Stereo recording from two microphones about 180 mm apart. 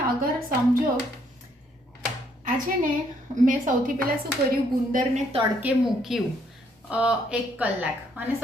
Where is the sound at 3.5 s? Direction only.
50° right (ahead or behind).